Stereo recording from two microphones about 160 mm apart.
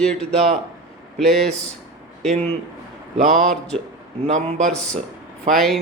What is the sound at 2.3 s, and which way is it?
Speech, 35° right (ahead or behind).